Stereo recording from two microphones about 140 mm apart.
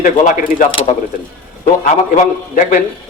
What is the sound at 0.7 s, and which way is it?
Speech, 40° left (ahead or behind).